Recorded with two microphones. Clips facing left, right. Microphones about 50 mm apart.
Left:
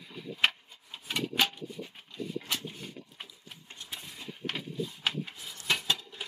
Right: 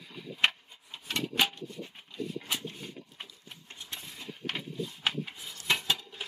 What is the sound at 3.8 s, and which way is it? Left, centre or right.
Horse, centre.